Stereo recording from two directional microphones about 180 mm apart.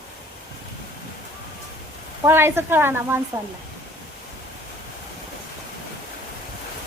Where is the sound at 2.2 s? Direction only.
15° right (ahead or behind).